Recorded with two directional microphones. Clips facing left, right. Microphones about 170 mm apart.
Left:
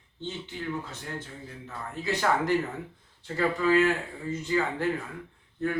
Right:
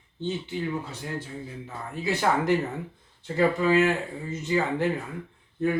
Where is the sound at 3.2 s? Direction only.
15° right (ahead or behind).